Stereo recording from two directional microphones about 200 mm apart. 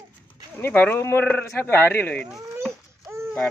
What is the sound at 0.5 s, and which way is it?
Speech, 10° left (ahead or behind).